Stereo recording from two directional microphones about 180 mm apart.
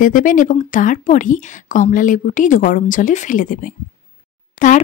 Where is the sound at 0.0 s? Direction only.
50° left (ahead or behind).